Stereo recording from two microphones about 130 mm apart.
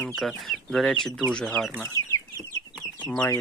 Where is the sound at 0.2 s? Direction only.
Centre (ahead or behind).